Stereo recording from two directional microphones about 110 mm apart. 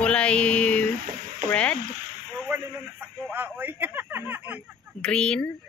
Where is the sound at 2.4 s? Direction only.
15° right (ahead or behind).